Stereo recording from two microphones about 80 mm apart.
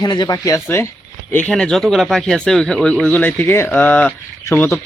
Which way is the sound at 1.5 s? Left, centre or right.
Centre.